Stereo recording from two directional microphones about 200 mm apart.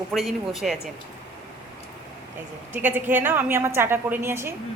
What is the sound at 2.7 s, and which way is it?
A woman's voice, 10° right (ahead or behind).